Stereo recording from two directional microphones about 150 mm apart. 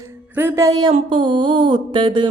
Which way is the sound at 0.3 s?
15° right (ahead or behind).